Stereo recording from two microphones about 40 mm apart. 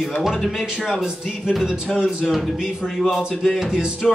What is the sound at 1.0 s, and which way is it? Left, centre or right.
Speech, centre.